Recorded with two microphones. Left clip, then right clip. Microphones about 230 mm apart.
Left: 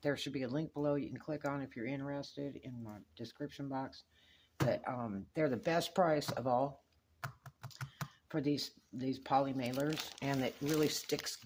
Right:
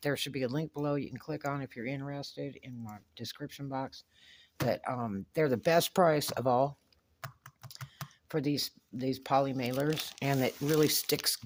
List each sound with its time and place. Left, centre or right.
0.0 s speech: right
7.2 s typing: centre
8.3 s speech: right